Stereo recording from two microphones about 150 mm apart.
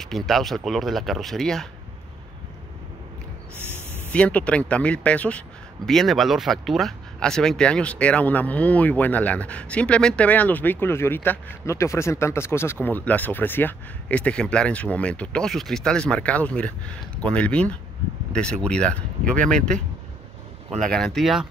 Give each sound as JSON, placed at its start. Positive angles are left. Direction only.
{"t": 0.0, "sound": "speech", "side_deg": 0}
{"t": 3.6, "sound": "a sound", "side_deg": -15}
{"t": 4.1, "sound": "speech", "side_deg": 10}
{"t": 20.9, "sound": "speech", "side_deg": 5}